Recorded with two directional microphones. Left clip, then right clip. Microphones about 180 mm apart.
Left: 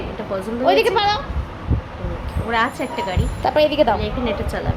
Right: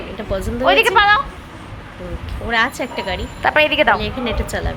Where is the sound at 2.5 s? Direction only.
20° right (ahead or behind).